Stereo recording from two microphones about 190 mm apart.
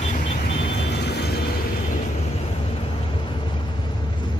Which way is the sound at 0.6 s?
65° left (ahead or behind).